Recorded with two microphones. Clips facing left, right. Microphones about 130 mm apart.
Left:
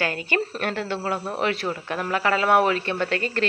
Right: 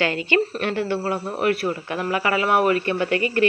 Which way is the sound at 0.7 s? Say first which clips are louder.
Right 4 dB; 60° left (ahead or behind).